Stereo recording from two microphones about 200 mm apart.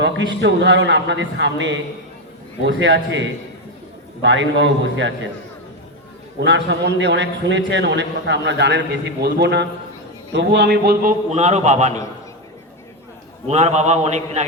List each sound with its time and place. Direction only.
0.0 s a man's voice: 65° right (ahead or behind)
6.4 s a man's voice: 65° right (ahead or behind)
11.3 s a man's voice: 35° right (ahead or behind)
13.5 s a man's voice: 35° right (ahead or behind)